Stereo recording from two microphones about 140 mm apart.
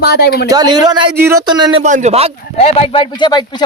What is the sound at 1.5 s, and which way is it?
Speech, 30° right (ahead or behind).